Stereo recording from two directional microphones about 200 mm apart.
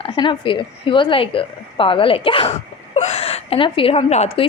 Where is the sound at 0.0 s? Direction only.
25° left (ahead or behind).